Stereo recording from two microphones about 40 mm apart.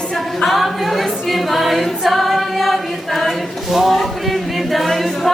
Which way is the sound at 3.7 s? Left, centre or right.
Centre.